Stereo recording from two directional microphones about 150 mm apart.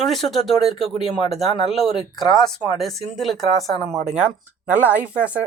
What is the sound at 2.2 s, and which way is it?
Speech, 30° left (ahead or behind).